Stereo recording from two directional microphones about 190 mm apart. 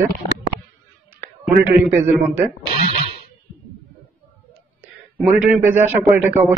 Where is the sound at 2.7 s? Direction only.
30° right (ahead or behind).